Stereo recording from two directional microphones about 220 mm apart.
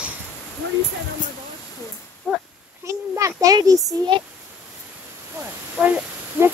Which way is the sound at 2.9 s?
15° right (ahead or behind).